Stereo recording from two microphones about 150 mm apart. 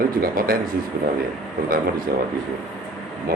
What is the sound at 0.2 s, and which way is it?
Speech, 70° right (ahead or behind).